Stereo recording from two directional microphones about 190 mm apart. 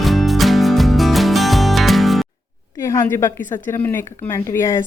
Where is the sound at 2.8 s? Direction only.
15° left (ahead or behind).